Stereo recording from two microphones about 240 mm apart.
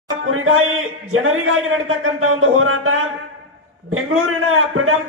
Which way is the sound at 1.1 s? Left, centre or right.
Right.